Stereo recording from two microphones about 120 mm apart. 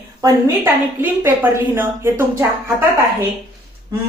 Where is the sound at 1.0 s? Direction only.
20° right (ahead or behind).